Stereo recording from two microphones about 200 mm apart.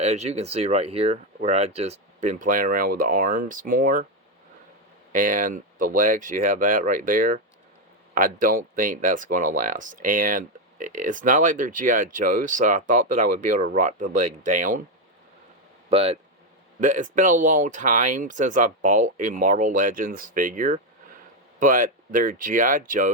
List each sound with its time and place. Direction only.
0.0 s speech: 35° right (ahead or behind)
5.1 s speech: 40° right (ahead or behind)
15.9 s speech: 30° right (ahead or behind)